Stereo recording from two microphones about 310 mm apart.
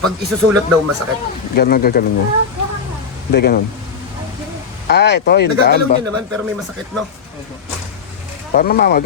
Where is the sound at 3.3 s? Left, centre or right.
Left.